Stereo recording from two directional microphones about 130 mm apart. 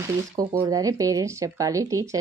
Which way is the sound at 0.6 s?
30° right (ahead or behind).